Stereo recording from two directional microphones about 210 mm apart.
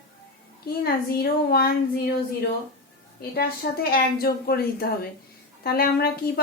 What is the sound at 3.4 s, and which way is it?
A woman's voice, 45° left (ahead or behind).